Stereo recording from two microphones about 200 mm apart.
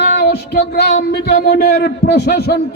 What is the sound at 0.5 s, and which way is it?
A man's voice, 50° left (ahead or behind).